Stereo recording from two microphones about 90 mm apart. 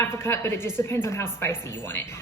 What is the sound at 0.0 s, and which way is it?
A woman's voice, 30° left (ahead or behind).